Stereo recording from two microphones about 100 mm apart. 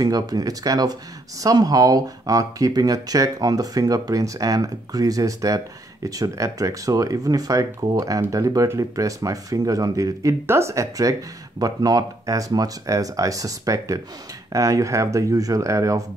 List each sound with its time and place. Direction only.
0.0 s speech: 40° right (ahead or behind)